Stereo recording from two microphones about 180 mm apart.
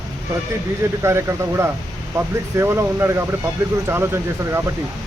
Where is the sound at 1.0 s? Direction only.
15° right (ahead or behind).